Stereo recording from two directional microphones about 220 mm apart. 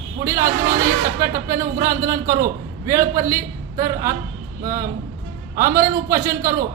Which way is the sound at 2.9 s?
15° right (ahead or behind).